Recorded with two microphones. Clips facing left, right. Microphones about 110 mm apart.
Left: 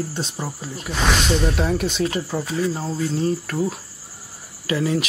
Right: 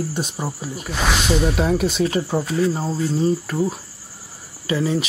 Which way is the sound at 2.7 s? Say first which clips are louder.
Right 2 dB; 10° right (ahead or behind).